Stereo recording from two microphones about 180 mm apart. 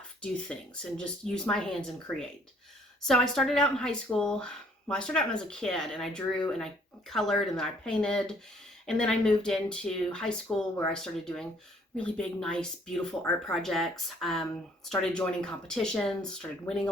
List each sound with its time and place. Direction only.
0.2 s speech: 5° left (ahead or behind)